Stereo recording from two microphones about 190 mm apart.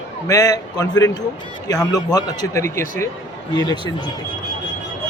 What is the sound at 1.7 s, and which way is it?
Speech, 5° left (ahead or behind).